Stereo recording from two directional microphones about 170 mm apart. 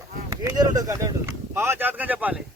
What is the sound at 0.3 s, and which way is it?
Speech, 20° right (ahead or behind).